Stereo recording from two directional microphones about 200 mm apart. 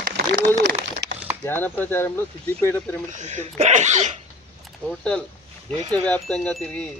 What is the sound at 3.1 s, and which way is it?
Speech, 35° right (ahead or behind).